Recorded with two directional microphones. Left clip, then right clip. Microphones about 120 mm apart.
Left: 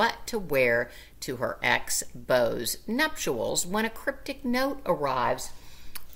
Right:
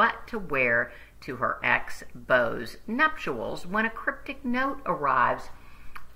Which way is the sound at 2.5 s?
40° left (ahead or behind).